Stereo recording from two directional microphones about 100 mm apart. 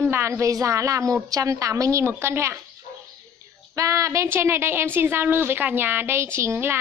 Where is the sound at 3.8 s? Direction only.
30° right (ahead or behind).